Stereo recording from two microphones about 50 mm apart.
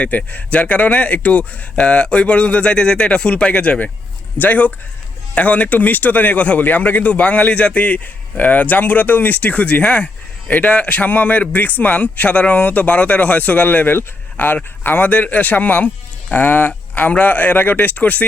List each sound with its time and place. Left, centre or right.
0.0 s speech: left
4.4 s a man's voice: left